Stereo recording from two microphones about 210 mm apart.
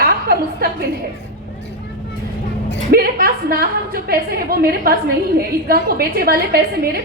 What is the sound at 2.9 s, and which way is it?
A woman's voice, 45° right (ahead or behind).